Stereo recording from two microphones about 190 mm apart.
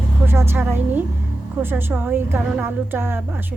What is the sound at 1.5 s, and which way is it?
A woman's voice, 10° right (ahead or behind).